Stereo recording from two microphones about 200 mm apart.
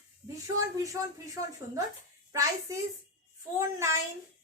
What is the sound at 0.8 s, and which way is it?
Speech, 15° right (ahead or behind).